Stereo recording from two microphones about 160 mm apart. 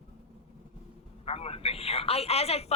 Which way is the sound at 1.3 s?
40° left (ahead or behind).